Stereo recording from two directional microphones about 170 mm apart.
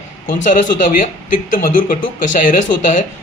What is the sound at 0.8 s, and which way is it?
Speech, 50° left (ahead or behind).